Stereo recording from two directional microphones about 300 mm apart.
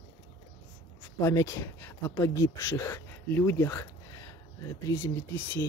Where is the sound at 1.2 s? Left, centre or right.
Centre.